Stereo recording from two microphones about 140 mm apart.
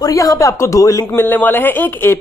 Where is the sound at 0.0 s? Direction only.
25° left (ahead or behind).